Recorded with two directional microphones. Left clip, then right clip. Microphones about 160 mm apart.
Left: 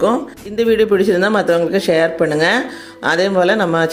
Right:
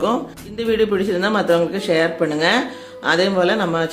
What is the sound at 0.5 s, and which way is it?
Speech, 45° left (ahead or behind).